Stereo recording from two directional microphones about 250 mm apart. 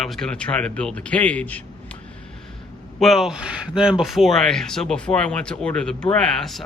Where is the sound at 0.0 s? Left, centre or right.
Centre.